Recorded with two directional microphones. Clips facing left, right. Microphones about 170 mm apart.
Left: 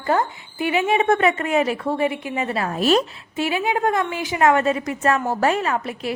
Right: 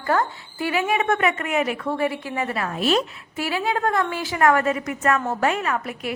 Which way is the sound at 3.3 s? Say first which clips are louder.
Left 2 dB; 20° left (ahead or behind).